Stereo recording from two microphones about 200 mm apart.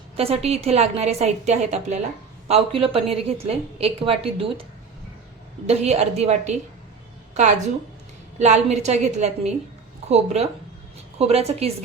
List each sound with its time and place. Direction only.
0.2 s a woman's voice: 30° right (ahead or behind)
5.6 s a woman's voice: 30° right (ahead or behind)
8.4 s a woman's voice: 35° right (ahead or behind)